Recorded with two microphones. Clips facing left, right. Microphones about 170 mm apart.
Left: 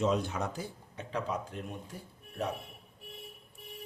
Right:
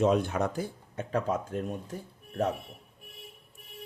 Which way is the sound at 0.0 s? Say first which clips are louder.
Right 5 dB; 55° right (ahead or behind).